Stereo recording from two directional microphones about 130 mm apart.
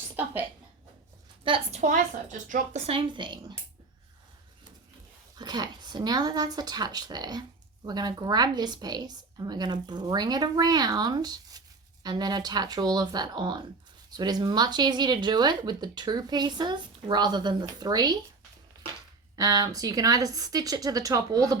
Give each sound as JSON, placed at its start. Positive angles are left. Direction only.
{"t": 1.5, "sound": "a woman's voice", "side_deg": -45}
{"t": 2.5, "sound": "a woman's voice", "side_deg": -55}
{"t": 5.4, "sound": "speech", "side_deg": -30}
{"t": 19.4, "sound": "a woman's voice", "side_deg": -30}